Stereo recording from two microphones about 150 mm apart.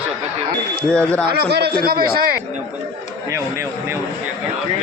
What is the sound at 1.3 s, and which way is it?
Speech, 90° right.